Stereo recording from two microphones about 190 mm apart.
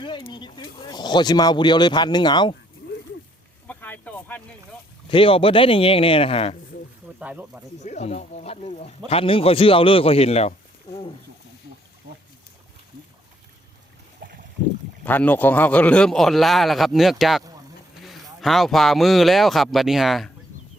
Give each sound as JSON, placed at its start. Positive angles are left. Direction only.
{"t": 0.0, "sound": "speech", "side_deg": 25}
{"t": 3.7, "sound": "a sound", "side_deg": 10}
{"t": 5.0, "sound": "speech", "side_deg": 30}
{"t": 7.2, "sound": "speech", "side_deg": -5}
{"t": 7.8, "sound": "speech", "side_deg": 35}
{"t": 14.2, "sound": "a sound", "side_deg": -55}
{"t": 15.0, "sound": "speech", "side_deg": 10}